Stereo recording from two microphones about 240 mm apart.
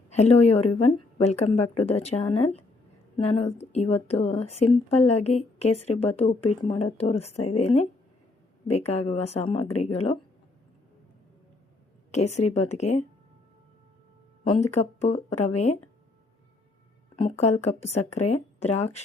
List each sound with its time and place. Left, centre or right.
0.1 s speech: left
12.1 s speech: left
14.8 s speech: left
17.2 s speech: left